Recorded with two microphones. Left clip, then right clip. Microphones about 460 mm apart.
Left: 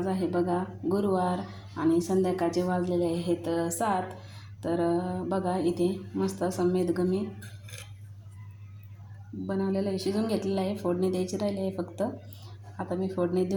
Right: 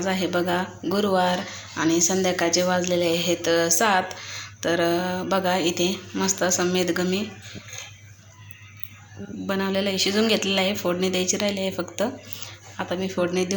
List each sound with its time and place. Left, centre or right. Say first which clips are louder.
0.0 s speech: right 5 dB; left
9.5 s speech: right 6 dB; left